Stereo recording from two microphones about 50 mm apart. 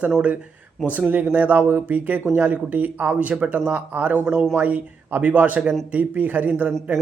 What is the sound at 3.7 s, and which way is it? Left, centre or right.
A man's voice, right.